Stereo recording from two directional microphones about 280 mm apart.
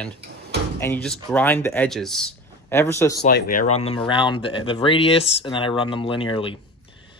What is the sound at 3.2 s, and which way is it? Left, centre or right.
Speech, left.